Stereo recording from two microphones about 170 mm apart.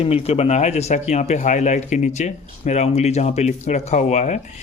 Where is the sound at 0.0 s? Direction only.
35° left (ahead or behind).